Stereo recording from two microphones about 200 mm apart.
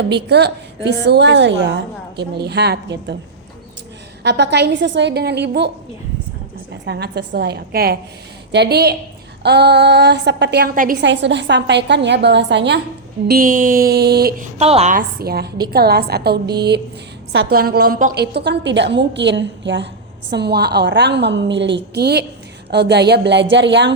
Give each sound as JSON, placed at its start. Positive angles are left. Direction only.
{"t": 0.1, "sound": "a woman's voice", "side_deg": -55}
{"t": 4.2, "sound": "a woman's voice", "side_deg": -60}
{"t": 6.8, "sound": "a woman's voice", "side_deg": -55}
{"t": 11.0, "sound": "a woman's voice", "side_deg": -60}
{"t": 13.2, "sound": "a woman's voice", "side_deg": -45}